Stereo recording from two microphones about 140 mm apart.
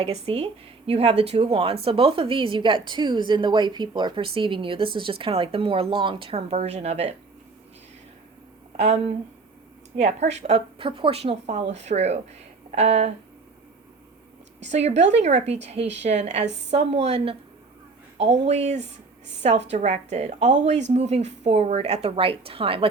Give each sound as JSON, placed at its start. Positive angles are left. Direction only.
{"t": 0.0, "sound": "a woman's voice", "side_deg": -45}
{"t": 8.7, "sound": "a woman's voice", "side_deg": -50}
{"t": 14.7, "sound": "a woman's voice", "side_deg": -50}